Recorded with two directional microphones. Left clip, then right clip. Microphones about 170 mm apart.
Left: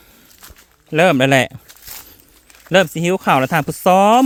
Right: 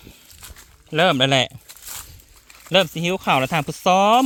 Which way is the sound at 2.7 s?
45° left (ahead or behind).